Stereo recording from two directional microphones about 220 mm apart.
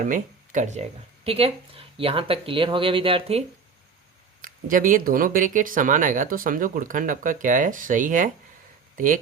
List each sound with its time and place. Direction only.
0.0 s speech: 35° right (ahead or behind)
4.4 s speech: 40° right (ahead or behind)